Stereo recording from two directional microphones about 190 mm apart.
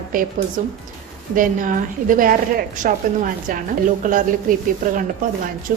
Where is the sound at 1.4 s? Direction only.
45° right (ahead or behind).